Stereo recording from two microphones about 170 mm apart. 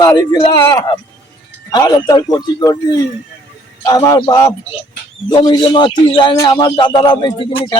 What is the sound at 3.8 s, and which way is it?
A man's voice, 20° left (ahead or behind).